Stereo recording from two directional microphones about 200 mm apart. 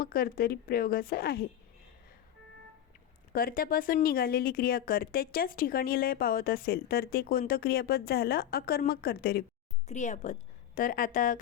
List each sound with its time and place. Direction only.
0.0 s speech: 45° left (ahead or behind)
3.3 s speech: 45° left (ahead or behind)
9.8 s a woman's voice: 35° left (ahead or behind)